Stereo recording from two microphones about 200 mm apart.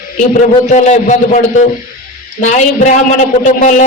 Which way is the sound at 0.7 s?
35° left (ahead or behind).